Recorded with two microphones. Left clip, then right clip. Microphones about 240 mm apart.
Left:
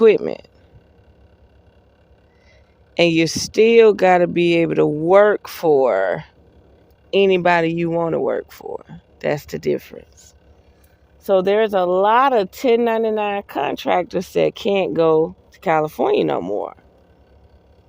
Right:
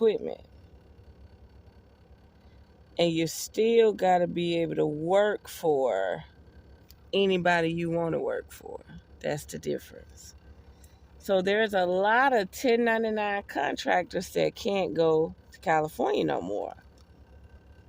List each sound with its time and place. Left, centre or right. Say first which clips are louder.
0.0 s speech: left 12 dB; left
2.9 s speech: left 11 dB; centre
11.2 s speech: left 9 dB; centre